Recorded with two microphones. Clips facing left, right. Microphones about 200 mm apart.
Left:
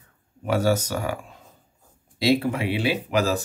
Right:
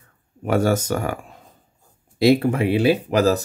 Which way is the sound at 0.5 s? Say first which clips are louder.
Right 3 dB; 50° right (ahead or behind).